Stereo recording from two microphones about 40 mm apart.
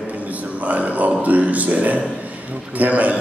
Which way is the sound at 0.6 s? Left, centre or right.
Right.